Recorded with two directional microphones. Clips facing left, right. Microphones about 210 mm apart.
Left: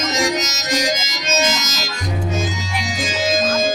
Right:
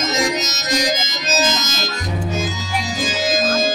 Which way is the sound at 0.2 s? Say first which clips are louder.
Left 1 dB; 30° right (ahead or behind).